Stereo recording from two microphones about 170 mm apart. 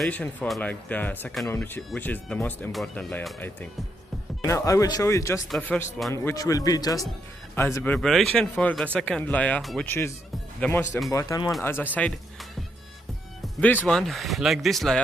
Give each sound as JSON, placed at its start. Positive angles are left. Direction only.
{"t": 0.0, "sound": "speech", "side_deg": 10}
{"t": 6.1, "sound": "speech", "side_deg": 20}
{"t": 9.8, "sound": "speech", "side_deg": 15}
{"t": 13.6, "sound": "speech", "side_deg": 10}